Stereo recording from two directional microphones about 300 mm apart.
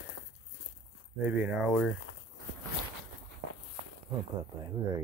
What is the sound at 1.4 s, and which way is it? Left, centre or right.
Speech, centre.